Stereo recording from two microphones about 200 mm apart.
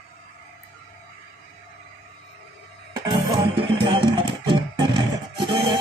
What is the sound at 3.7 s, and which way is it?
Music, 25° right (ahead or behind).